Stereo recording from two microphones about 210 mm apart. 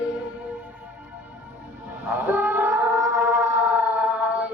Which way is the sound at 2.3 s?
10° right (ahead or behind).